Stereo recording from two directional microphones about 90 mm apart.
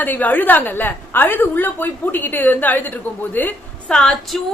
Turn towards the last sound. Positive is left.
turn(degrees=5)  # may be behind; listen again after turning